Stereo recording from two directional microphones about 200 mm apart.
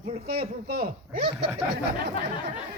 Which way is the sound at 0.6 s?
50° right (ahead or behind).